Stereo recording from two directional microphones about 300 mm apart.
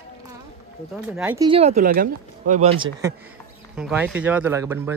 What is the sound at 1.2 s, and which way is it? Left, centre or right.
Speech, centre.